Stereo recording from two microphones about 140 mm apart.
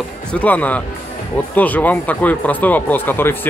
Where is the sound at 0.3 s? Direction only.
10° left (ahead or behind).